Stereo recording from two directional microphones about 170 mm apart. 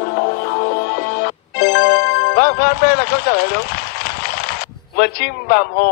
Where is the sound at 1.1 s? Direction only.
65° left (ahead or behind).